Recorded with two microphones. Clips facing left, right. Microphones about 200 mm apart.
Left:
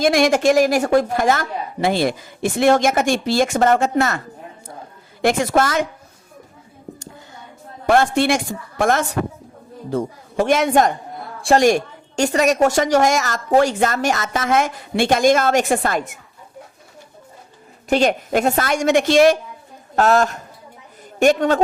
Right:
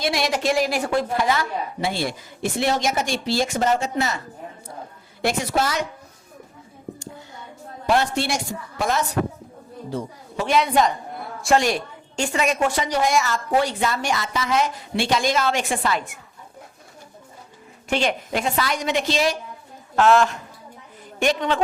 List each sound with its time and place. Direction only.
0.0 s a woman's voice: 50° left (ahead or behind)
5.2 s a woman's voice: 50° left (ahead or behind)
7.9 s a woman's voice: 50° left (ahead or behind)
11.3 s a sound: 30° left (ahead or behind)
11.6 s a woman's voice: 45° left (ahead or behind)
17.8 s a woman's voice: 40° left (ahead or behind)
20.0 s a woman's voice: 40° left (ahead or behind)